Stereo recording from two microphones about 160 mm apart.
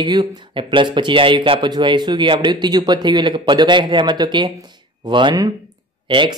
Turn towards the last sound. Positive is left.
turn(degrees=-30)  # may be behind; listen again after turning